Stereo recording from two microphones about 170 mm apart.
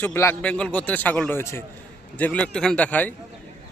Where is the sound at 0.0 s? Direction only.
15° left (ahead or behind).